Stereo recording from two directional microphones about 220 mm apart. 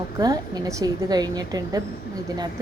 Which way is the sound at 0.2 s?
15° right (ahead or behind).